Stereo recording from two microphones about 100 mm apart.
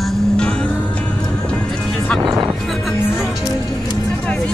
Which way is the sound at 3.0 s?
20° left (ahead or behind).